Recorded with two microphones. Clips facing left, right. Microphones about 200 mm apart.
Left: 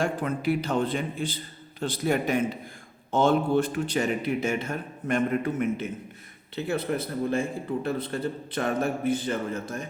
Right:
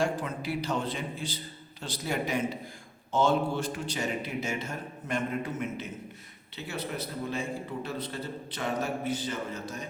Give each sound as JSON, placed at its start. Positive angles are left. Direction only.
{"t": 0.0, "sound": "a man's voice", "side_deg": 55}